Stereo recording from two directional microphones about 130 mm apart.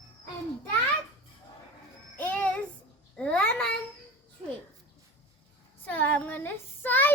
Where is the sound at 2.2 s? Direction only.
15° left (ahead or behind).